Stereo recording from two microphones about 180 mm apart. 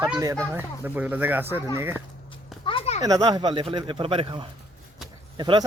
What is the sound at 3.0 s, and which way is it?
Speech, 20° right (ahead or behind).